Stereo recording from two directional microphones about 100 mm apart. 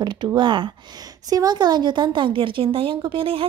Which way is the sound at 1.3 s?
40° right (ahead or behind).